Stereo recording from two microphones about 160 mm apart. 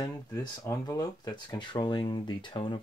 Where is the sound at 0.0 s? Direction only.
25° left (ahead or behind).